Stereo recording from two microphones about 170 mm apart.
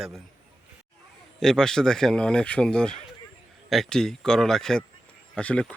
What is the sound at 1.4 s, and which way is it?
Speech, 5° left (ahead or behind).